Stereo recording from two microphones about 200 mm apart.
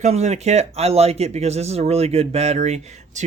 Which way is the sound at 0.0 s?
35° right (ahead or behind).